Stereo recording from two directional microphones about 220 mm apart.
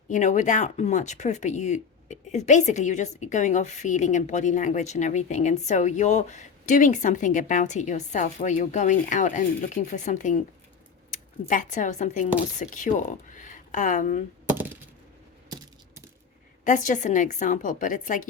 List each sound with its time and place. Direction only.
0.1 s speech: 35° left (ahead or behind)
16.6 s speech: 35° left (ahead or behind)